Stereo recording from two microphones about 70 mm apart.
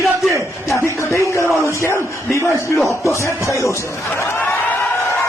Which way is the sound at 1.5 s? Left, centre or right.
Left.